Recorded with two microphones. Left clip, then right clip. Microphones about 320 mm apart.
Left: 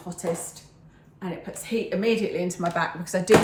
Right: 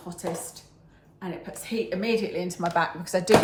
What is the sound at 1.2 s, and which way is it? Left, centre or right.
A woman's voice, centre.